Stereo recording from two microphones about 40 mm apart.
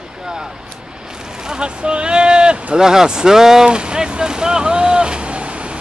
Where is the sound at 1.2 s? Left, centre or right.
Centre.